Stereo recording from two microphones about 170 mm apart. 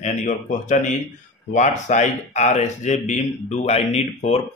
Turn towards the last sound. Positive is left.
turn(degrees=40)  # may be behind; listen again after turning